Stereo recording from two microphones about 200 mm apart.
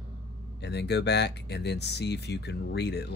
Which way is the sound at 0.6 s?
55° left (ahead or behind).